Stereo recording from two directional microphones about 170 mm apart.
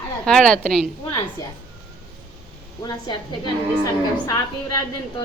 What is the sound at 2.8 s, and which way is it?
A woman's voice, 25° left (ahead or behind).